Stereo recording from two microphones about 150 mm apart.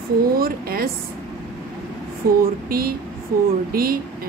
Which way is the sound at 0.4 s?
80° right.